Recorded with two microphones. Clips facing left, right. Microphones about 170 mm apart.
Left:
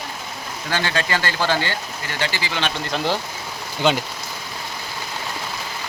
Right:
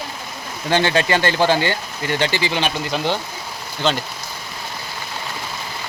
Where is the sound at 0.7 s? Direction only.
20° right (ahead or behind).